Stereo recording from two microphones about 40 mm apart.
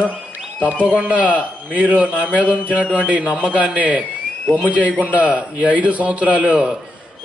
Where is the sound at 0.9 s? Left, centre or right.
Right.